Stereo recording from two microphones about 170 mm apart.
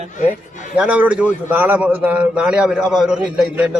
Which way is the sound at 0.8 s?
5° right (ahead or behind).